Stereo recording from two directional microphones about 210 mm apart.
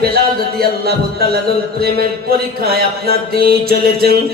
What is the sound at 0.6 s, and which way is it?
Music, 50° right (ahead or behind).